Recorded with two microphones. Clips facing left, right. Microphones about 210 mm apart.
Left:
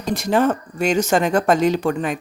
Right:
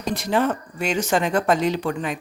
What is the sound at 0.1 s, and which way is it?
Speech, 45° left (ahead or behind).